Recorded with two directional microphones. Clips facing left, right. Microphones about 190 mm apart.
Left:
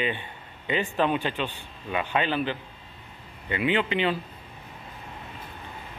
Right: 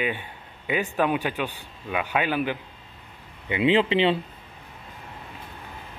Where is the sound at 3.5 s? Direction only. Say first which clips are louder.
Right 5 dB; 25° right (ahead or behind).